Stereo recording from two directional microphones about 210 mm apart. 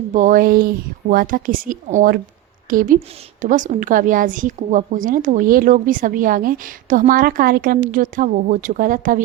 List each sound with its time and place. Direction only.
0.1 s a woman's voice: 40° right (ahead or behind)